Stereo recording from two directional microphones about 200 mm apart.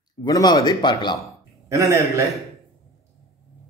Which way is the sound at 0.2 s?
20° left (ahead or behind).